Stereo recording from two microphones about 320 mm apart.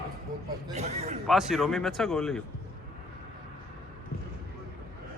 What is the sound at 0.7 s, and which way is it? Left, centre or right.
Speech, centre.